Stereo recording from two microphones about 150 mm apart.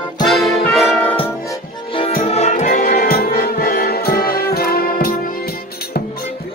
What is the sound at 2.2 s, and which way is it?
Music, 45° left (ahead or behind).